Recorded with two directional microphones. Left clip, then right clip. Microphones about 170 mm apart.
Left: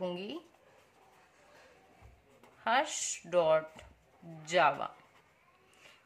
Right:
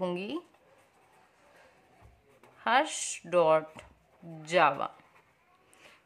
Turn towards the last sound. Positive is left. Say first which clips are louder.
# right 3 dB
turn(degrees=-35)  # may be behind; listen again after turning